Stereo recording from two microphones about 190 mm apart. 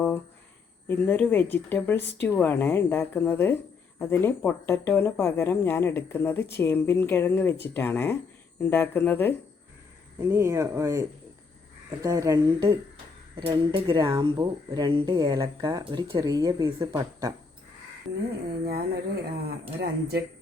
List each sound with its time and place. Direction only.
0.9 s speech: 10° left (ahead or behind)
10.2 s speech: 15° right (ahead or behind)
12.0 s speech: 15° right (ahead or behind)
18.6 s speech: 55° right (ahead or behind)